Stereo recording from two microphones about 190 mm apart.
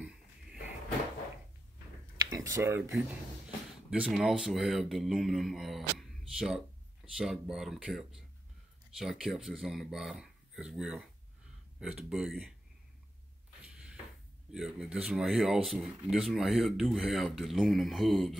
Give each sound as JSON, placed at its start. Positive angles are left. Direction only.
{"t": 2.3, "sound": "a sound", "side_deg": -15}
{"t": 3.9, "sound": "speech", "side_deg": -5}
{"t": 14.5, "sound": "speech", "side_deg": -5}